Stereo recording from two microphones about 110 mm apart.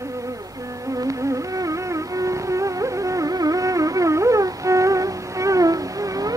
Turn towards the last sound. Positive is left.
turn(degrees=-30)  # may be behind; listen again after turning